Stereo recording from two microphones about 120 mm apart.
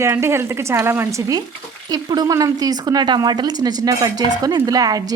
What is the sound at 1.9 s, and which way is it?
Speech, 35° right (ahead or behind).